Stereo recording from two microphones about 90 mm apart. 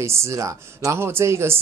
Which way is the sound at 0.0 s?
30° right (ahead or behind).